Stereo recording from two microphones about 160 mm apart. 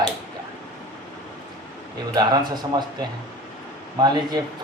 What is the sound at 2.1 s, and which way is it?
Speech, 25° right (ahead or behind).